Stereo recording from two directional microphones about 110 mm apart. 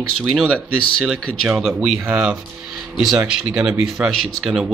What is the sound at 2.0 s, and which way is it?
Speech, 15° right (ahead or behind).